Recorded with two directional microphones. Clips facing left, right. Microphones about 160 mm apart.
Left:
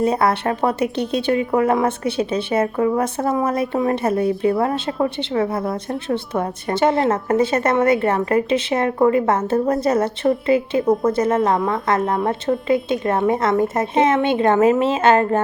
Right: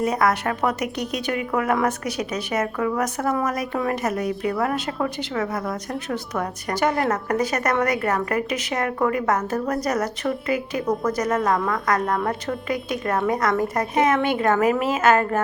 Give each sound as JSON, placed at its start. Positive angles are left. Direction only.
{"t": 0.0, "sound": "speech", "side_deg": 30}